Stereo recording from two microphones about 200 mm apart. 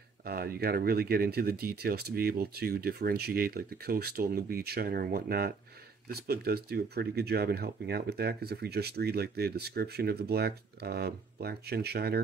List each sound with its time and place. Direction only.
0.2 s speech: 50° right (ahead or behind)